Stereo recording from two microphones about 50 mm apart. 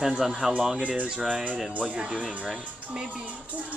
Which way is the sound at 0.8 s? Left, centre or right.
Right.